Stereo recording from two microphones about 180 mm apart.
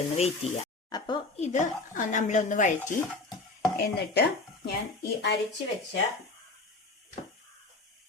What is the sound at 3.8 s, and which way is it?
Speech, 60° left (ahead or behind).